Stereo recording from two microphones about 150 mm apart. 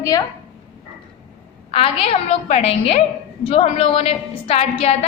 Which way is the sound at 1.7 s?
40° left (ahead or behind).